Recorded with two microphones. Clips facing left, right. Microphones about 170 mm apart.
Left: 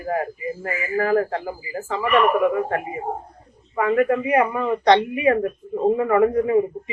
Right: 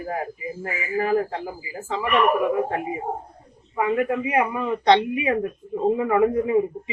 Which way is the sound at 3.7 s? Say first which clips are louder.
Left 3 dB; 15° right (ahead or behind).